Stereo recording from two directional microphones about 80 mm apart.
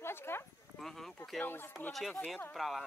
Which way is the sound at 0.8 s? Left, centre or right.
Centre.